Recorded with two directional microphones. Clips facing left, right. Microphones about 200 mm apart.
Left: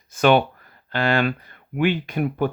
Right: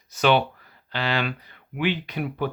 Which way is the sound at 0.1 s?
50° left (ahead or behind).